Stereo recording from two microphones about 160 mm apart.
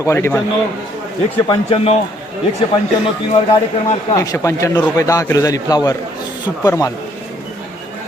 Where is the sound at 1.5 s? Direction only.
35° left (ahead or behind).